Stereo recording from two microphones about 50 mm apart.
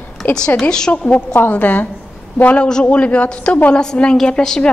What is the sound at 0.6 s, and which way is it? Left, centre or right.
Speech, centre.